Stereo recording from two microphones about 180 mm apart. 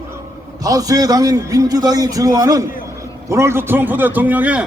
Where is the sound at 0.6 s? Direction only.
20° right (ahead or behind).